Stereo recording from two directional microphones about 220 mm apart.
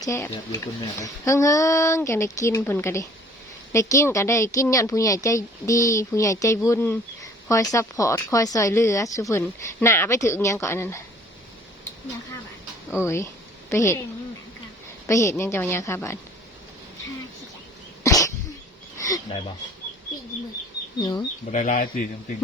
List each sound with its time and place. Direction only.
0.0 s a woman's voice: 15° left (ahead or behind)
13.7 s a woman's voice: 10° left (ahead or behind)
15.0 s a woman's voice: 15° left (ahead or behind)
18.0 s cough: 15° left (ahead or behind)
18.9 s speech: 15° left (ahead or behind)
21.0 s speech: 20° left (ahead or behind)
21.5 s speech: 35° left (ahead or behind)